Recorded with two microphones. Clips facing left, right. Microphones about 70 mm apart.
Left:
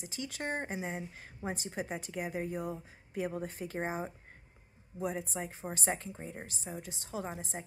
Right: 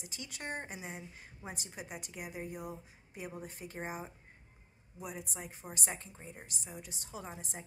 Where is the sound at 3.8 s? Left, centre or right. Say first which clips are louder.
Left 5 dB; left.